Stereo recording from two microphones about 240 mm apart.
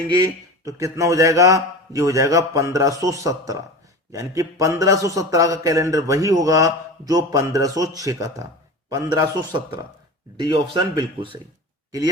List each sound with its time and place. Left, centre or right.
0.1 s a man's voice: centre